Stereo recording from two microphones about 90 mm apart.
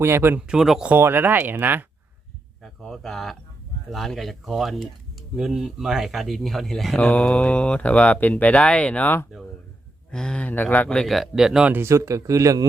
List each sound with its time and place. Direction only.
0.0 s speech: 25° right (ahead or behind)
0.3 s speech: 10° right (ahead or behind)
0.9 s speech: 25° right (ahead or behind)
2.6 s speech: 5° left (ahead or behind)
7.0 s speech: 15° left (ahead or behind); by 11.7 s 5° right (ahead or behind)
11.7 s speech: 30° right (ahead or behind)